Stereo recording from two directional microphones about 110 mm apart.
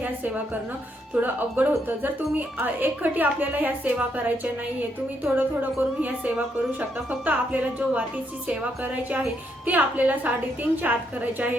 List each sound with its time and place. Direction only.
0.0 s a woman's voice: 15° right (ahead or behind)